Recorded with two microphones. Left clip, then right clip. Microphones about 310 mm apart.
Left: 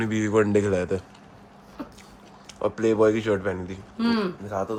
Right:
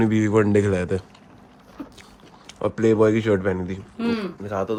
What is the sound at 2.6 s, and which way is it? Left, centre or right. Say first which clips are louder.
Speech: right 2 dB; right.